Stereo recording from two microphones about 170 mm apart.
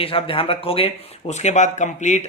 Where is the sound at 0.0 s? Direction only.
35° left (ahead or behind).